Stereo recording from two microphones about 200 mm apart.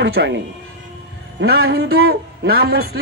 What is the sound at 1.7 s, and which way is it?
A man's voice, 55° right (ahead or behind).